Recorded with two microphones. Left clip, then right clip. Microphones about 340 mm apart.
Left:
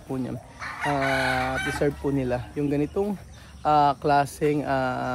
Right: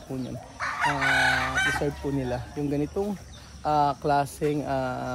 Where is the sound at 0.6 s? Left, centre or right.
Right.